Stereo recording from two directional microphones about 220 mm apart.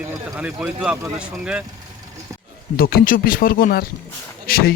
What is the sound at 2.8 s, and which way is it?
Speech, 45° left (ahead or behind).